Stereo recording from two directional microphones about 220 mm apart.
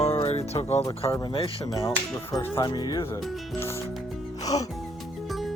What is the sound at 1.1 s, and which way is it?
Music, 20° left (ahead or behind).